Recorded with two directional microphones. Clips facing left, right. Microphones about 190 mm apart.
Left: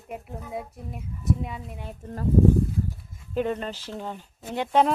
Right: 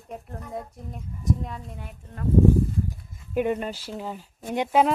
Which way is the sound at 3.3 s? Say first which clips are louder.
Right 2 dB; 10° right (ahead or behind).